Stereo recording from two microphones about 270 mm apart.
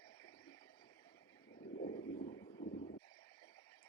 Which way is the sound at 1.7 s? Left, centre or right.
Left.